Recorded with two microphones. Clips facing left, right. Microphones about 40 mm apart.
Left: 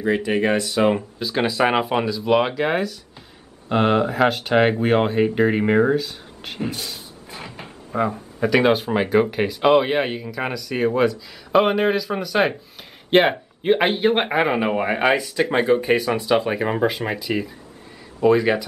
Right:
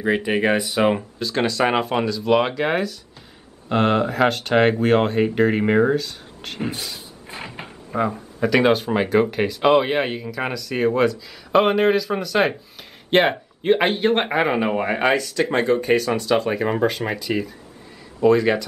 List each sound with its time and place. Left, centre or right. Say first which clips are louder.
0.0 s speech: even; centre
0.9 s speech: even; centre
7.2 s a sound: right 3 dB; right
7.6 s drawer open or close: even; centre
8.4 s speech: even; centre